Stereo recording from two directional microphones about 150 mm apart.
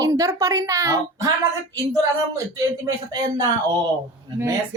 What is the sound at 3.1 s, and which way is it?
Speech, 25° right (ahead or behind).